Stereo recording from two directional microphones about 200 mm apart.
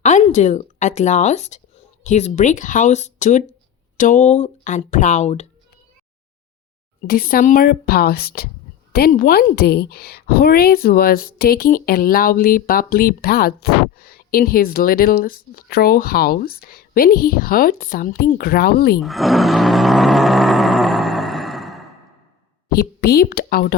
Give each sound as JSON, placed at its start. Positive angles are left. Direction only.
{"t": 0.0, "sound": "speech", "side_deg": 35}
{"t": 7.1, "sound": "a woman's voice", "side_deg": 45}
{"t": 18.9, "sound": "roar", "side_deg": 0}
{"t": 22.7, "sound": "speech", "side_deg": 50}